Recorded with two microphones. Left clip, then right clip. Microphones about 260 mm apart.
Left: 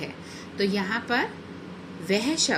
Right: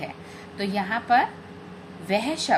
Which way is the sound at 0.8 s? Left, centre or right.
Centre.